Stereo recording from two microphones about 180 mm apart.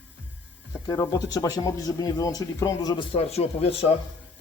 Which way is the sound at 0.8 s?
20° left (ahead or behind).